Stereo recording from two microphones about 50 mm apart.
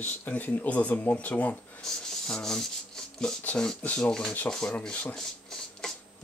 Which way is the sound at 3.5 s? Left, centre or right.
Left.